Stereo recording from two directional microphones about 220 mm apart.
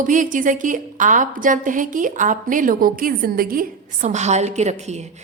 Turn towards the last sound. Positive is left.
turn(degrees=-30)  # may be behind; listen again after turning